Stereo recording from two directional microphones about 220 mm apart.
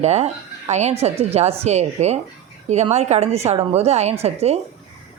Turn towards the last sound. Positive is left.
turn(degrees=-30)  # may be behind; listen again after turning